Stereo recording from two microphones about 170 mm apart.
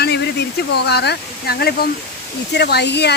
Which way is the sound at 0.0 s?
75° left (ahead or behind).